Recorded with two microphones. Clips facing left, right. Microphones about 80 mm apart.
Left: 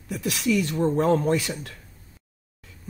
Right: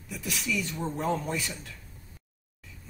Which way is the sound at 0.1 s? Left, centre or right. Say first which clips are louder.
Left 8 dB; left.